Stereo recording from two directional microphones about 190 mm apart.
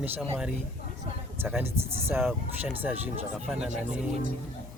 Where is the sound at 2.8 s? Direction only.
5° right (ahead or behind).